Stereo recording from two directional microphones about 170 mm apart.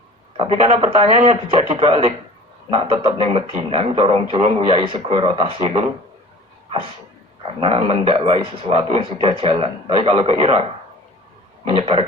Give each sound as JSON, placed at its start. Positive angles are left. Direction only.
{"t": 0.3, "sound": "speech", "side_deg": -35}
{"t": 7.4, "sound": "speech", "side_deg": -30}